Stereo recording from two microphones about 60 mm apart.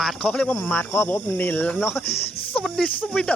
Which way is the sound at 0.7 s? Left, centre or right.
Left.